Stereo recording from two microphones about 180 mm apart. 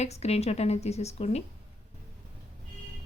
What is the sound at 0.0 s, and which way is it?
A woman's voice, 35° left (ahead or behind).